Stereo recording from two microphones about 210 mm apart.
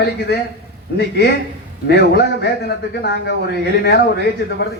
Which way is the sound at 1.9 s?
50° left (ahead or behind).